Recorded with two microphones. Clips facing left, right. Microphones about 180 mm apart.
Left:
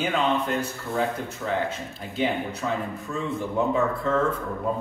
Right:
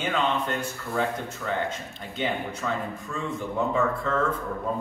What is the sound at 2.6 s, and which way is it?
Speech, 15° left (ahead or behind).